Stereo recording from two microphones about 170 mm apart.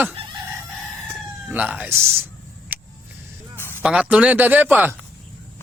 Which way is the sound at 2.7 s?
10° right (ahead or behind).